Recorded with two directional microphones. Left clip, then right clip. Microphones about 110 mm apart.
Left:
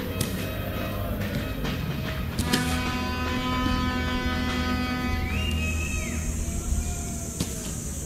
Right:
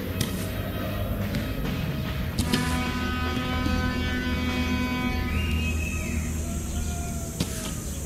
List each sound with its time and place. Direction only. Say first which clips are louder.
2.5 s music: left 1 dB; 20° left (ahead or behind)